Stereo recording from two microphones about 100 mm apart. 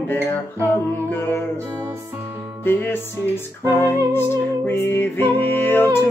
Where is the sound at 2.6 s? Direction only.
20° left (ahead or behind).